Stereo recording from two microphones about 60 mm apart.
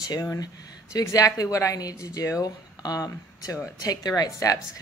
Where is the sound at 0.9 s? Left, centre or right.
Left.